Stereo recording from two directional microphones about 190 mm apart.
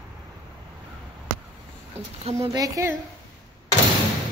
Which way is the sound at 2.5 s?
20° right (ahead or behind).